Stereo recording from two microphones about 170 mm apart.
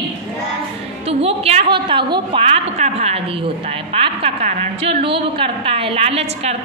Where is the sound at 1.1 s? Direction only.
35° right (ahead or behind).